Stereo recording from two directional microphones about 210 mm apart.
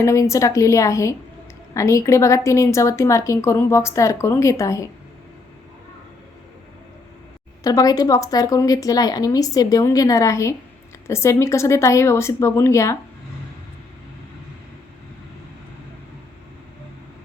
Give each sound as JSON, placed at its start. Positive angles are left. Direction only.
{"t": 0.0, "sound": "a woman's voice", "side_deg": 15}
{"t": 7.6, "sound": "a woman's voice", "side_deg": 15}